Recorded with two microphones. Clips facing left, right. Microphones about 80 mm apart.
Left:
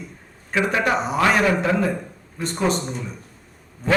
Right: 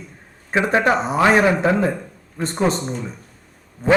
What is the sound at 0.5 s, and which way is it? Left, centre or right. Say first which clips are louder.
A man's voice: right 3 dB; right.